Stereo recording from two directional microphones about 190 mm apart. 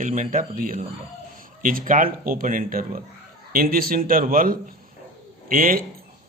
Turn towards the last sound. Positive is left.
turn(degrees=-45)  # may be behind; listen again after turning